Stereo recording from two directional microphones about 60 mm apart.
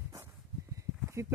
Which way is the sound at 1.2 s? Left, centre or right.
Right.